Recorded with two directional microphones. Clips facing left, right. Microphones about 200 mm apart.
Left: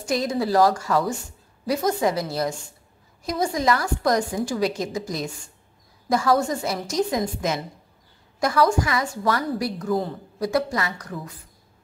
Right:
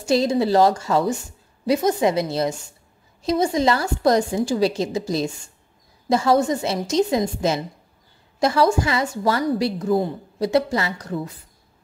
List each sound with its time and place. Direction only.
0.0 s a woman's voice: 25° right (ahead or behind)